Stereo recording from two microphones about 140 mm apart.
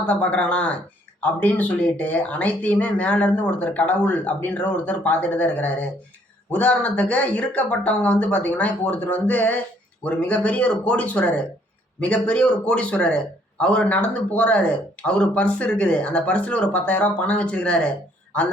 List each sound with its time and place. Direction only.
0.0 s speech: 10° left (ahead or behind)